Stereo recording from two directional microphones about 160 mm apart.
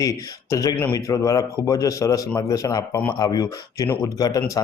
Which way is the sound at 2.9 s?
10° left (ahead or behind).